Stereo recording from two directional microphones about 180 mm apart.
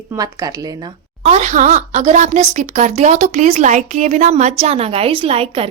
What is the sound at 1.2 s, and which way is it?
Speech, 40° right (ahead or behind).